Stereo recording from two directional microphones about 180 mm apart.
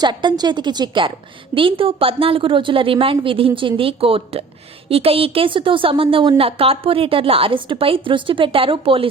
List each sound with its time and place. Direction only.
0.0 s a woman's voice: 25° right (ahead or behind)